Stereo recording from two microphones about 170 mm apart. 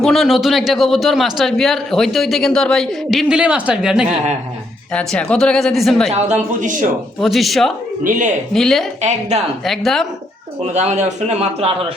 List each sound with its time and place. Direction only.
0.0 s a man's voice: centre (ahead or behind)
4.9 s a man's voice: 5° left (ahead or behind)
6.1 s speech: 40° right (ahead or behind)
7.2 s a man's voice: centre (ahead or behind)
9.0 s speech: 40° right (ahead or behind)
9.6 s a man's voice: centre (ahead or behind)
10.6 s speech: 40° right (ahead or behind)